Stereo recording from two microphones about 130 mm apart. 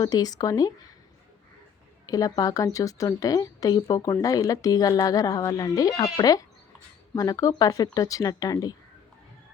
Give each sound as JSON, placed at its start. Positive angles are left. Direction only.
{"t": 0.0, "sound": "speech", "side_deg": 30}
{"t": 2.0, "sound": "speech", "side_deg": 30}